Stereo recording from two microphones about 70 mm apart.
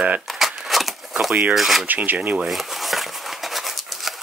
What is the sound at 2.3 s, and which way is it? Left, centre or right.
Crumpling, centre.